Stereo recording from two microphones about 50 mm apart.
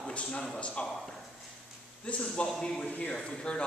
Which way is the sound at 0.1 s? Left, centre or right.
Left.